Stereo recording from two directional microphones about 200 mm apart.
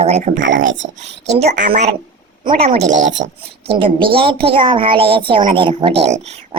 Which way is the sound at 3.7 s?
25° right (ahead or behind).